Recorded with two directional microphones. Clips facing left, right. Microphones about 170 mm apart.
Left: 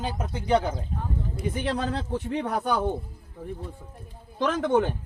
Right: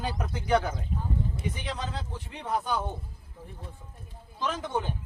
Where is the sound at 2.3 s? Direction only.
70° left (ahead or behind).